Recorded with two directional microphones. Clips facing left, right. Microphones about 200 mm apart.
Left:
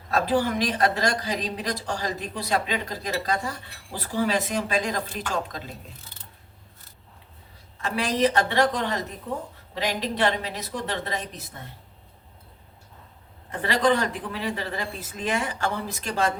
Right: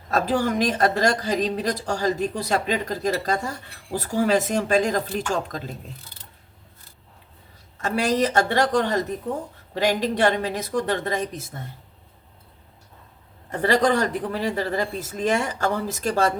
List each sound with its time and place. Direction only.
0.1 s speech: 45° right (ahead or behind)
7.8 s speech: 45° right (ahead or behind)
13.5 s speech: 40° right (ahead or behind)